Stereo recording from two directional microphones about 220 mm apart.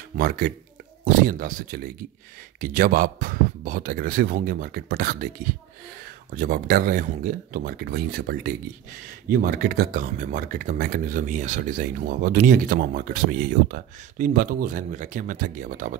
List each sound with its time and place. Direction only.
1.0 s speech: 40° right (ahead or behind)